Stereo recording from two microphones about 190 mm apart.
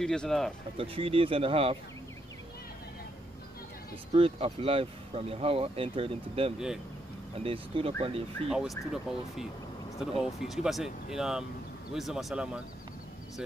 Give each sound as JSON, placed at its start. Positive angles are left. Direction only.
{"t": 0.0, "sound": "speech", "side_deg": 5}
{"t": 0.7, "sound": "speech", "side_deg": -30}
{"t": 4.1, "sound": "speech", "side_deg": -30}
{"t": 8.5, "sound": "speech", "side_deg": 0}